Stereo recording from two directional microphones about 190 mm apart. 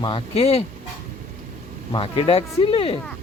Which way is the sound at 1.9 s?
30° left (ahead or behind).